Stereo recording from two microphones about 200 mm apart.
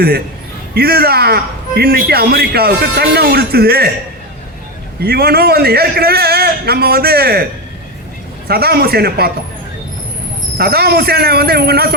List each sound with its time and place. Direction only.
0.7 s a man's voice: 50° right (ahead or behind)
4.9 s a man's voice: 50° right (ahead or behind)
8.4 s a man's voice: 50° right (ahead or behind)
10.6 s a man's voice: 50° right (ahead or behind)